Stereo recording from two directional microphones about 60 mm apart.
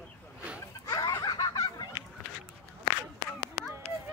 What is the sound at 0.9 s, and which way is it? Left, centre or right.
Snicker, left.